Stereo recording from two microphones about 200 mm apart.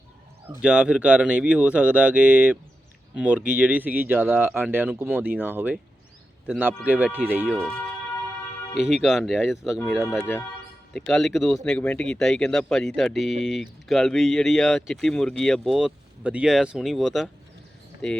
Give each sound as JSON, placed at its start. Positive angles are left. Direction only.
{"t": 0.4, "sound": "speech", "side_deg": -5}
{"t": 8.7, "sound": "speech", "side_deg": 0}